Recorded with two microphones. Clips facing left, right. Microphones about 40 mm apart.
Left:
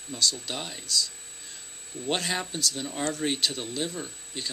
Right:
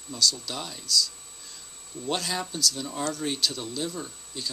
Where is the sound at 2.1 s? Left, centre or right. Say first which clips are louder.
Left 1 dB; left.